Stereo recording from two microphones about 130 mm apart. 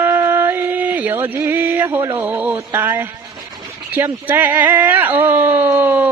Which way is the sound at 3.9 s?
15° right (ahead or behind).